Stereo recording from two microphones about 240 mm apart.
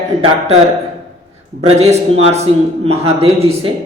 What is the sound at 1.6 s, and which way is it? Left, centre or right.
Speech, right.